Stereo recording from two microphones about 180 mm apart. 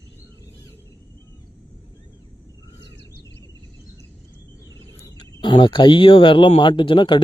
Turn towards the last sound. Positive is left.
turn(degrees=30)  # may be behind; listen again after turning